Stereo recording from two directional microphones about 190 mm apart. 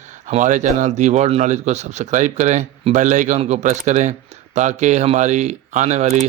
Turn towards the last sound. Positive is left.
turn(degrees=-35)  # may be behind; listen again after turning